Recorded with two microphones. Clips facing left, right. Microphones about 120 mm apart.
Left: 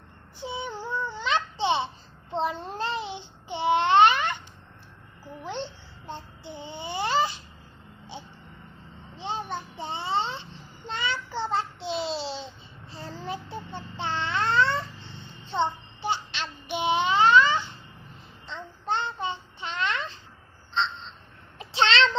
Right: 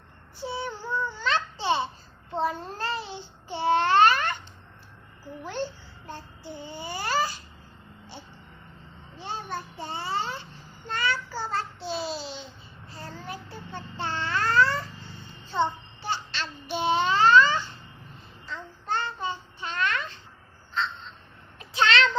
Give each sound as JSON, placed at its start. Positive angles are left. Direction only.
{"t": 0.3, "sound": "babbling", "side_deg": 15}
{"t": 5.5, "sound": "babbling", "side_deg": 20}
{"t": 9.1, "sound": "a sound", "side_deg": 20}
{"t": 10.9, "sound": "child singing", "side_deg": 20}
{"t": 13.2, "sound": "babbling", "side_deg": 20}
{"t": 15.4, "sound": "child singing", "side_deg": 20}
{"t": 20.7, "sound": "quack", "side_deg": 25}
{"t": 21.6, "sound": "a sound", "side_deg": 25}